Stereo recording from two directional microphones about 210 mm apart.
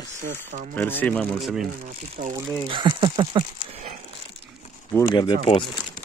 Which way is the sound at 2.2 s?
35° right (ahead or behind).